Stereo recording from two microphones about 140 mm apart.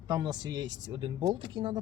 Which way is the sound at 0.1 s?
30° right (ahead or behind).